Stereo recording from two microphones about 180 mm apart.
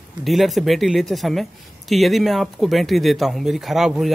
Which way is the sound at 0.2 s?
Centre (ahead or behind).